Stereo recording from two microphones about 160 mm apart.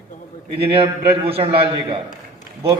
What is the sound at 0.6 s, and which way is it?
A man's voice, 35° right (ahead or behind).